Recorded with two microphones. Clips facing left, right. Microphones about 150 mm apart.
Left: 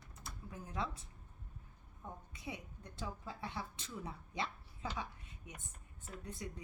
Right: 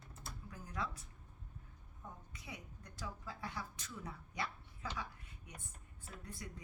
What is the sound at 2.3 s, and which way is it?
A woman's voice, 25° left (ahead or behind).